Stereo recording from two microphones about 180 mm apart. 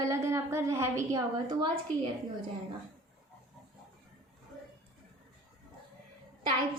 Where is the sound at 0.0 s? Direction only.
15° right (ahead or behind).